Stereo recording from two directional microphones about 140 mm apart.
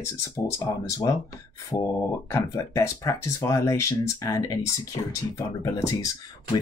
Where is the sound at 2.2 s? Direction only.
20° left (ahead or behind).